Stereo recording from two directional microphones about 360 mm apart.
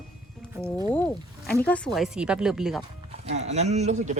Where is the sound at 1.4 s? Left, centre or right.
Centre.